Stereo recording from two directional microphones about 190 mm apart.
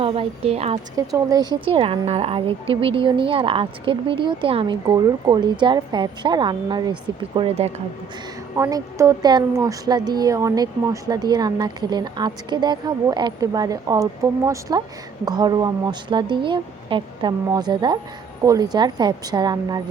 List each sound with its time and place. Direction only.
0.0 s a woman's voice: 30° right (ahead or behind)
0.9 s a woman's voice: 20° right (ahead or behind)
8.5 s a woman's voice: 15° right (ahead or behind)